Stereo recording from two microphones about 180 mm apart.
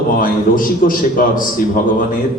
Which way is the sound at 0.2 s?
50° left (ahead or behind).